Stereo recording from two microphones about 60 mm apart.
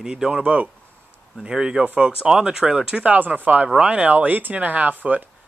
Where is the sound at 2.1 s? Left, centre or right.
Centre.